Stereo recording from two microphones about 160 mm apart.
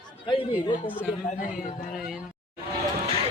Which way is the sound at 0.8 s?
10° right (ahead or behind).